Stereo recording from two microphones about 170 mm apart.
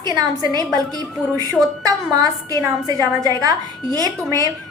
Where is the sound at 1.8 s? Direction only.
20° right (ahead or behind).